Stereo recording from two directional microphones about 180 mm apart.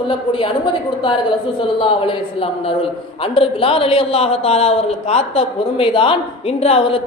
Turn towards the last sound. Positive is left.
turn(degrees=30)  # may be behind; listen again after turning